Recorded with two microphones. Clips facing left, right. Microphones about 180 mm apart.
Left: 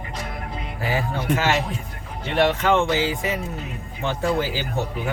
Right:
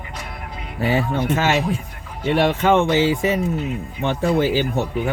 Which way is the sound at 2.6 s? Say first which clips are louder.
Right 4 dB; 20° right (ahead or behind).